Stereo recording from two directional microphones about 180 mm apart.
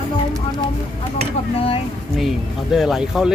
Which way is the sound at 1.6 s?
30° left (ahead or behind).